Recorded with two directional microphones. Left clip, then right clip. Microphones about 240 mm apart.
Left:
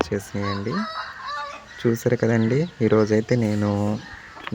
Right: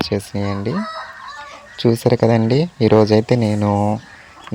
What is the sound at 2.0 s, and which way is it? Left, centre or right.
Speech, right.